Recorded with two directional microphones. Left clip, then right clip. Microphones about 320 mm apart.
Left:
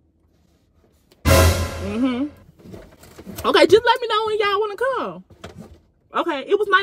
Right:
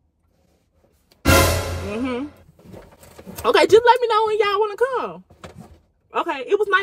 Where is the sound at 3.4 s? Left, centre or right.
Centre.